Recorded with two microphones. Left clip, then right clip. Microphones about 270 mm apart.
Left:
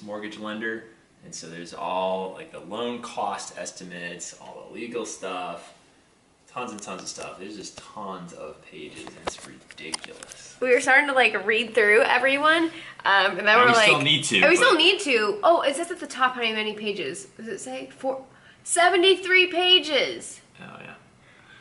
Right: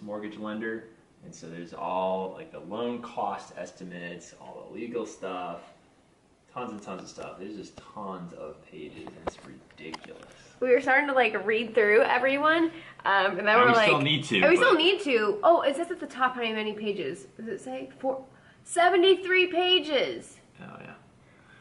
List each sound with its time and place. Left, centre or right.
0.0 s speech: centre
4.4 s speech: right
4.7 s speech: centre